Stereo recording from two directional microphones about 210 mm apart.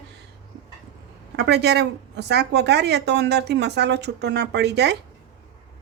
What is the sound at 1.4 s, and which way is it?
A woman's voice, 50° right (ahead or behind).